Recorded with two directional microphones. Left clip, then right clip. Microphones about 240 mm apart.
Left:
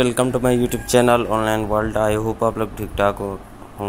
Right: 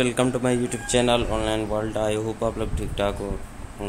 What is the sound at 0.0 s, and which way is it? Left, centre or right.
Speech, centre.